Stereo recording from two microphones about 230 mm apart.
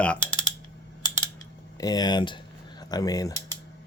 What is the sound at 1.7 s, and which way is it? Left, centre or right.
Speech, centre.